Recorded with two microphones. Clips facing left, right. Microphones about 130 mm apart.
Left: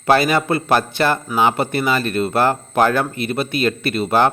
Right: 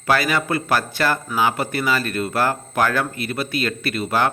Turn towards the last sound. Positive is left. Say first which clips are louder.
# left 4 dB
turn(degrees=25)  # may be behind; listen again after turning